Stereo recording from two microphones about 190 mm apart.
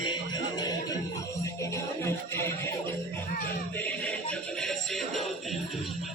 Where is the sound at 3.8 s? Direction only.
5° left (ahead or behind).